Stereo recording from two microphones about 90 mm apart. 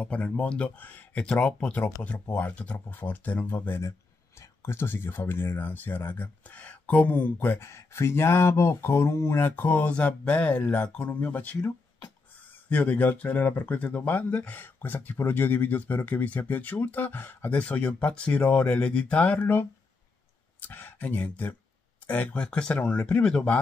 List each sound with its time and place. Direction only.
0.0 s speech: 15° left (ahead or behind)
20.6 s speech: 20° left (ahead or behind)